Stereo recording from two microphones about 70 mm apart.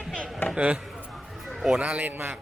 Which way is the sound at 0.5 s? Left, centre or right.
Centre.